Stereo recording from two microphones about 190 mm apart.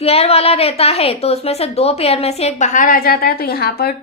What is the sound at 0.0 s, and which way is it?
A woman's voice, 30° left (ahead or behind).